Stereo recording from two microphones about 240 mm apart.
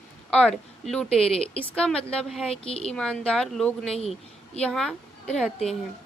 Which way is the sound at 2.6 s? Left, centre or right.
Left.